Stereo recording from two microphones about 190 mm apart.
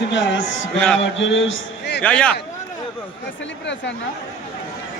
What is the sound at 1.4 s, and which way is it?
Speech, 75° left (ahead or behind).